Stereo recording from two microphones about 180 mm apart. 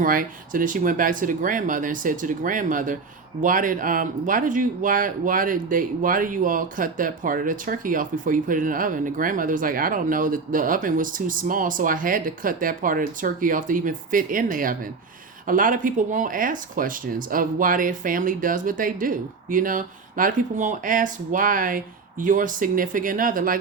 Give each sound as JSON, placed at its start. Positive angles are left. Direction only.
{"t": 0.0, "sound": "speech", "side_deg": -50}